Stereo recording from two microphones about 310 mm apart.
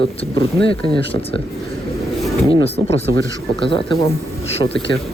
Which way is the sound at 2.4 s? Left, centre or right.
Centre.